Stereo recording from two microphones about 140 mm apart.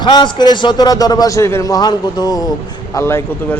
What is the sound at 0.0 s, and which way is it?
A man's voice, 30° left (ahead or behind).